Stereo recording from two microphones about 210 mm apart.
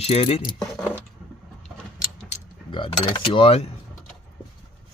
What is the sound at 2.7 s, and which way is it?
Speech, 25° left (ahead or behind).